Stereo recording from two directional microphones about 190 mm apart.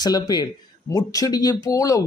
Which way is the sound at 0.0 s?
20° left (ahead or behind).